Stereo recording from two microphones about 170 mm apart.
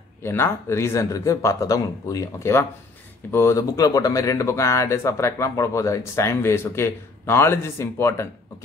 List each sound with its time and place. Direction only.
0.2 s speech: 15° left (ahead or behind)